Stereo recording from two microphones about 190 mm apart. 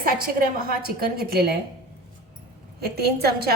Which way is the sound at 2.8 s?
55° right (ahead or behind).